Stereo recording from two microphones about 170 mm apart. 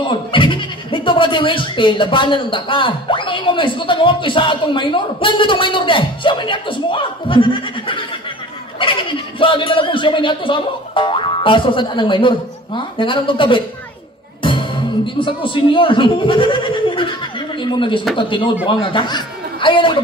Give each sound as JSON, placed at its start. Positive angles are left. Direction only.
{"t": 0.0, "sound": "speech", "side_deg": 30}
{"t": 9.4, "sound": "speech", "side_deg": 30}